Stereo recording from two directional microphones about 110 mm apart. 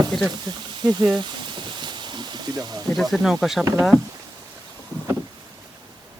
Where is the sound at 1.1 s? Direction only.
45° right (ahead or behind).